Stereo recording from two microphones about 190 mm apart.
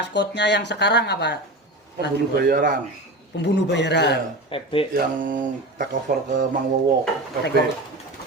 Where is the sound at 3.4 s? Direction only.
65° left (ahead or behind).